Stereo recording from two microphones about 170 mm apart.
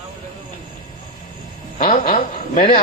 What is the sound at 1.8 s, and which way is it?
Speech, 55° left (ahead or behind).